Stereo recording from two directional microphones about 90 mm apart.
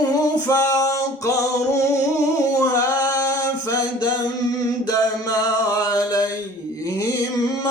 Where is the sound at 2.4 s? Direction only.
35° left (ahead or behind).